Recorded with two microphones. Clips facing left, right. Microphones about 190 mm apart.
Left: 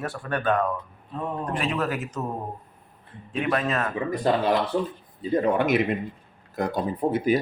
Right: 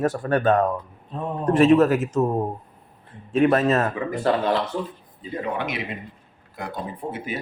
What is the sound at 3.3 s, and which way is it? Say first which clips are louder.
Speech: right 7 dB; 45° right (ahead or behind).